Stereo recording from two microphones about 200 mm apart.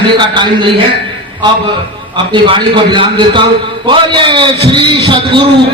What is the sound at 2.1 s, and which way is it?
A man's voice, 25° right (ahead or behind).